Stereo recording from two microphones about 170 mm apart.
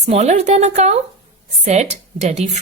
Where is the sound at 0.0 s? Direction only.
40° right (ahead or behind).